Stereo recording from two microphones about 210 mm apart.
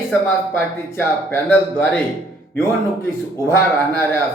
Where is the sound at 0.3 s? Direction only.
10° left (ahead or behind).